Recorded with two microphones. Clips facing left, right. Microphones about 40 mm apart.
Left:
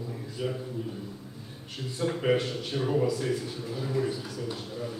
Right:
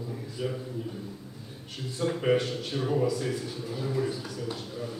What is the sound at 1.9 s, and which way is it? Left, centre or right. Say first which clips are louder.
A man's voice: right 1 dB; centre.